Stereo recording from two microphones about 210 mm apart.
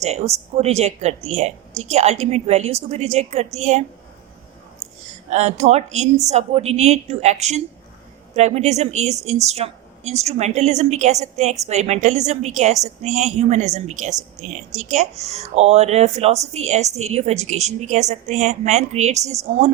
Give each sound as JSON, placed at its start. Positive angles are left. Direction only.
{"t": 0.0, "sound": "a woman's voice", "side_deg": -30}
{"t": 5.3, "sound": "a woman's voice", "side_deg": -30}